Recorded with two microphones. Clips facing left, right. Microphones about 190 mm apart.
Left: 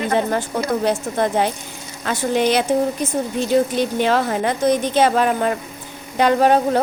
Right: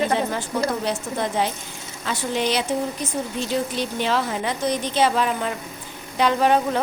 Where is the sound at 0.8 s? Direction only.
50° left (ahead or behind).